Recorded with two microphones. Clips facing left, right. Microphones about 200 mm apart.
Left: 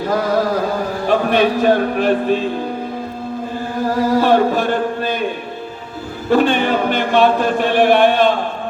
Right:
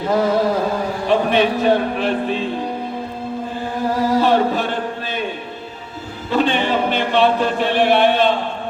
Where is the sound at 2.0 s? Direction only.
45° left (ahead or behind).